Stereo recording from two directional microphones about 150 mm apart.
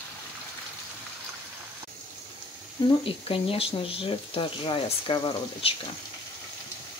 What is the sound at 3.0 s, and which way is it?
Speech, 35° left (ahead or behind).